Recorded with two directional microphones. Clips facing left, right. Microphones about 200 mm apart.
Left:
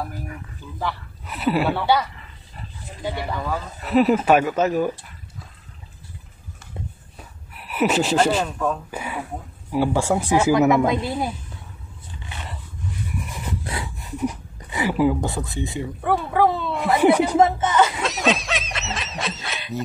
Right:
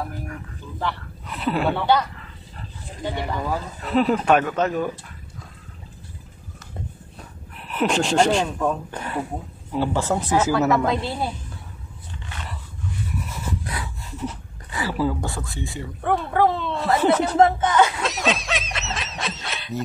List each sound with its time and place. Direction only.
0.3 s speech: 10° left (ahead or behind)
3.2 s speech: 15° right (ahead or behind)
3.8 s speech: 5° left (ahead or behind)
7.5 s speech: 5° left (ahead or behind)
13.3 s a sound: 20° left (ahead or behind)
16.0 s a sound: 5° left (ahead or behind)